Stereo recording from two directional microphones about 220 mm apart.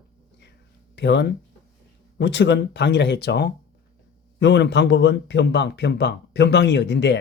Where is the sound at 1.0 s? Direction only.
50° left (ahead or behind).